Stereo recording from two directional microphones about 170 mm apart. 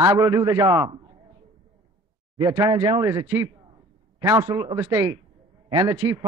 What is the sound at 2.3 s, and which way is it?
A man's voice, 20° right (ahead or behind).